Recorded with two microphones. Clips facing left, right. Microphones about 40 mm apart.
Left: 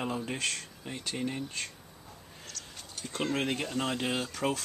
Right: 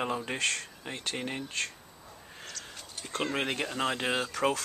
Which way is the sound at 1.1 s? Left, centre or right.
Right.